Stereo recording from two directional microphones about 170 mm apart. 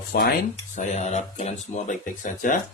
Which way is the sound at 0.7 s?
45° left (ahead or behind).